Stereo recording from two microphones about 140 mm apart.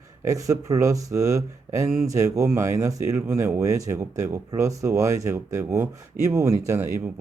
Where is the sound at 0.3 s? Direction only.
25° right (ahead or behind).